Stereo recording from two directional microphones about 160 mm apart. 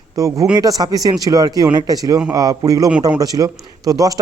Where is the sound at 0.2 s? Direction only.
20° right (ahead or behind).